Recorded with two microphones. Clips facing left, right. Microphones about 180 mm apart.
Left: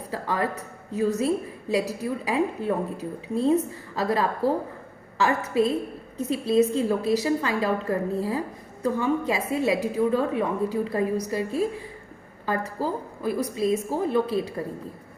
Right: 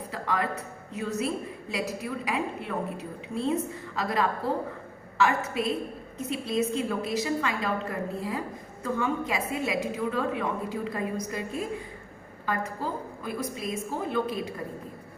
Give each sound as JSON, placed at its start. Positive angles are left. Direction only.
{"t": 0.1, "sound": "a woman's voice", "side_deg": 35}